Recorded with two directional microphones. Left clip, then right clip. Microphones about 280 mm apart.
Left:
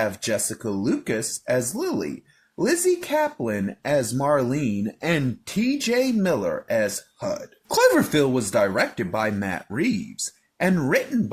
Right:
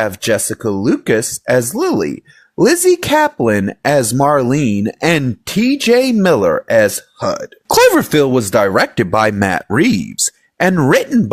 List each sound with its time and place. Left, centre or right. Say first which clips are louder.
0.0 s speech: right 9 dB; right